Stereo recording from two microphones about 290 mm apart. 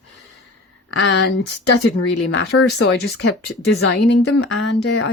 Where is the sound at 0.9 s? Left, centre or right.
Left.